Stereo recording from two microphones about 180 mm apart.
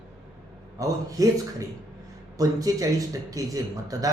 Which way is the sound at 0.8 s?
20° right (ahead or behind).